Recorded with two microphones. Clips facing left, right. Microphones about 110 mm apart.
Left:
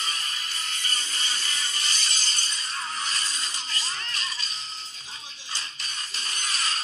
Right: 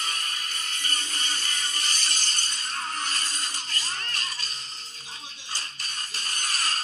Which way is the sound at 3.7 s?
50° right (ahead or behind).